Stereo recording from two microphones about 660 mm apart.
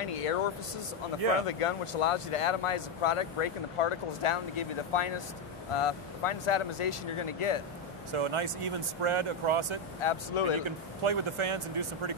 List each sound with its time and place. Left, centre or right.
0.0 s a sound: left
1.5 s speech: left
8.1 s speech: right
9.9 s speech: left
10.6 s speech: right